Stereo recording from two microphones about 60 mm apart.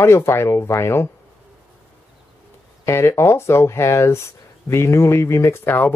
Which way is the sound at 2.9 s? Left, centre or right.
Left.